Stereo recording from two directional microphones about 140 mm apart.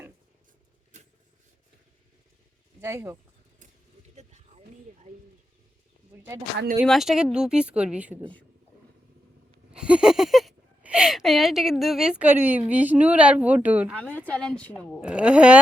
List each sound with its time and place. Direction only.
2.8 s speech: 20° right (ahead or behind)
4.1 s a sound: 55° right (ahead or behind)
6.8 s speech: centre (ahead or behind)
9.7 s speech: 5° right (ahead or behind)
13.9 s a woman's voice: 10° left (ahead or behind)
15.0 s speech: 5° right (ahead or behind)